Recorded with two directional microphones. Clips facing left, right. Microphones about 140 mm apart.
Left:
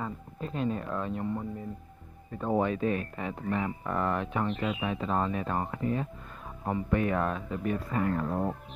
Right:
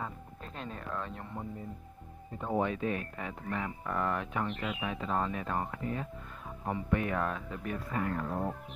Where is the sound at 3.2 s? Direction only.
25° left (ahead or behind).